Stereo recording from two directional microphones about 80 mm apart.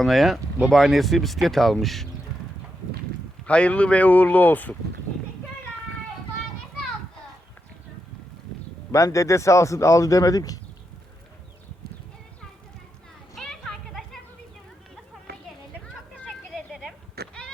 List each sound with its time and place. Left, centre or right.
0.0 s speech: centre
3.4 s speech: centre
8.9 s speech: left
13.3 s children playing: centre
16.5 s a sound: centre